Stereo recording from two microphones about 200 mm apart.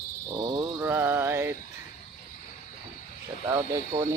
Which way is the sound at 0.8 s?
10° right (ahead or behind).